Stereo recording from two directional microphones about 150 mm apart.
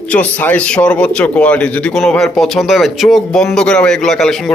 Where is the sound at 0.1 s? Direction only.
10° left (ahead or behind).